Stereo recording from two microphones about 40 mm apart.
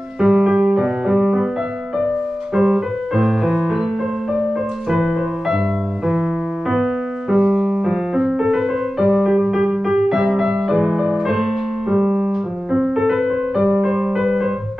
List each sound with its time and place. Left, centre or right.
0.2 s music: centre
2.5 s music: centre
4.8 s music: centre
6.7 s music: centre
11.9 s piano: centre
13.8 s music: centre